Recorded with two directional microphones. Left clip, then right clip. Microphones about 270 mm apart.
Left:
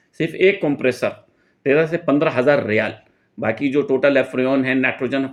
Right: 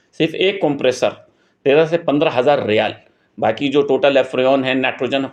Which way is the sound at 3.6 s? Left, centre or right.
Right.